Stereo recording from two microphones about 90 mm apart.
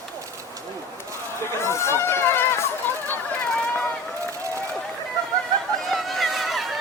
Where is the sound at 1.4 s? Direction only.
30° left (ahead or behind).